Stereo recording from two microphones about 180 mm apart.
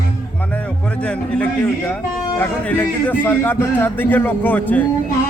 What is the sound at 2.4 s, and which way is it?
A man's voice, 10° left (ahead or behind).